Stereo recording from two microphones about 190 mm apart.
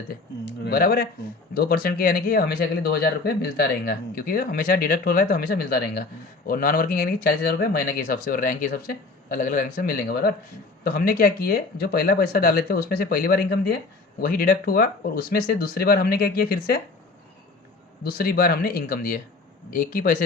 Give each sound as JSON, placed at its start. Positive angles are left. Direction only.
{"t": 0.1, "sound": "speech", "side_deg": 60}
{"t": 18.0, "sound": "speech", "side_deg": 55}